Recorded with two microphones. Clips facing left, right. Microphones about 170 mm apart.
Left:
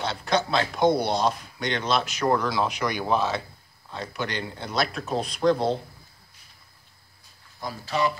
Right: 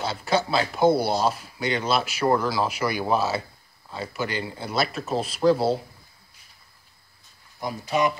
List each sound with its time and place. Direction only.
0.0 s speech: 5° right (ahead or behind)
7.6 s speech: 20° right (ahead or behind)